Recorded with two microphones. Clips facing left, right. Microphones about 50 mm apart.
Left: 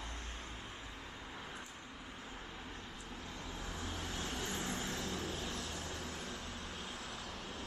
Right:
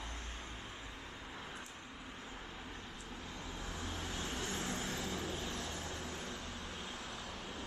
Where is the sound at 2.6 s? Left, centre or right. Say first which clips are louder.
Even; centre.